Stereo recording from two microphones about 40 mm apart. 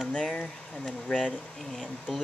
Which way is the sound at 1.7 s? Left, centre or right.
Centre.